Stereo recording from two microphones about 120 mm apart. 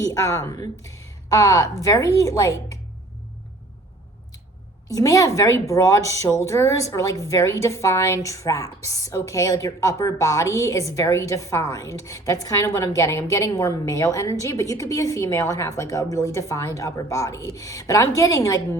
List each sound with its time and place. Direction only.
0.0 s a woman's voice: 25° left (ahead or behind)
4.9 s a woman's voice: 30° left (ahead or behind)